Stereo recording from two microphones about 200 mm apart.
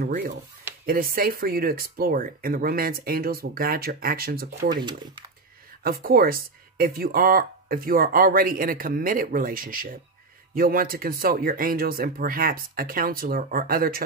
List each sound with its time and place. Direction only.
0.0 s speech: 50° right (ahead or behind)
4.8 s speech: 20° right (ahead or behind)
5.9 s speech: 50° right (ahead or behind)